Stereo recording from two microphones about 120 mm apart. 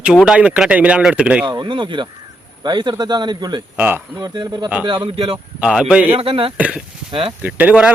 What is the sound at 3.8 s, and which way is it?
Speech, 15° right (ahead or behind).